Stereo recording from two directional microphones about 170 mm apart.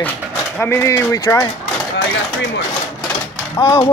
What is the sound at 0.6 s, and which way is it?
Speech, 15° left (ahead or behind).